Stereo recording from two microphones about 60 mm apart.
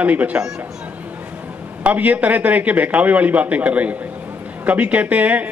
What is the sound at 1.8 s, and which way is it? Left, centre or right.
A man's voice, right.